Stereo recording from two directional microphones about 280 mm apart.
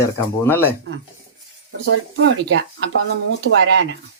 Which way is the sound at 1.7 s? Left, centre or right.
Right.